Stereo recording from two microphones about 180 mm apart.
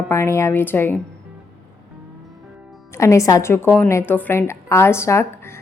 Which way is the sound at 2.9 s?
15° left (ahead or behind).